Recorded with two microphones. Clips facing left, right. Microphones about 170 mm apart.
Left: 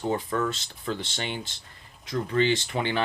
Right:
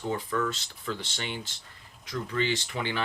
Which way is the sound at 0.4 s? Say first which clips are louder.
Left 3 dB; 25° left (ahead or behind).